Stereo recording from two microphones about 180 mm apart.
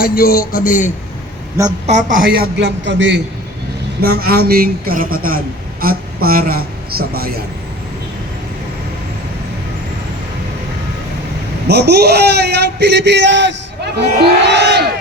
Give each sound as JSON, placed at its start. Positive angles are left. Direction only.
{"t": 0.0, "sound": "a man's voice", "side_deg": 55}
{"t": 1.6, "sound": "a woman's voice", "side_deg": -15}
{"t": 1.9, "sound": "speech", "side_deg": -45}
{"t": 4.0, "sound": "a man's voice", "side_deg": -55}
{"t": 11.7, "sound": "a man's voice", "side_deg": -65}
{"t": 14.0, "sound": "speech", "side_deg": -70}